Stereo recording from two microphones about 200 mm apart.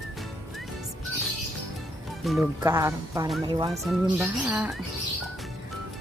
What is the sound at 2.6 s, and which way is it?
Speech, 15° right (ahead or behind).